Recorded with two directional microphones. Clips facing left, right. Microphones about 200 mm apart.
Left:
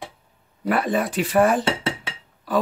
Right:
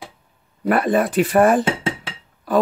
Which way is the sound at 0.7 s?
50° right (ahead or behind).